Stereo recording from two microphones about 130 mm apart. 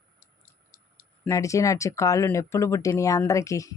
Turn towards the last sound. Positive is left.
turn(degrees=25)  # may be behind; listen again after turning